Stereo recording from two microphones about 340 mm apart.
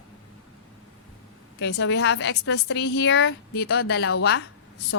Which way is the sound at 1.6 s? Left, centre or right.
Left.